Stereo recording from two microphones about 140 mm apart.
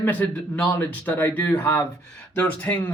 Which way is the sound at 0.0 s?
10° left (ahead or behind).